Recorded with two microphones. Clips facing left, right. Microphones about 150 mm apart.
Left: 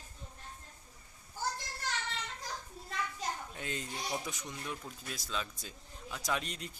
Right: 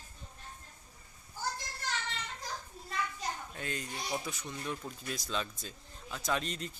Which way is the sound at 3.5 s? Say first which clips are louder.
Right 1 dB; 20° left (ahead or behind).